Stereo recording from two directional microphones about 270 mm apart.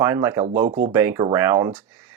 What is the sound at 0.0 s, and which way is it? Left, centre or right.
Speech, centre.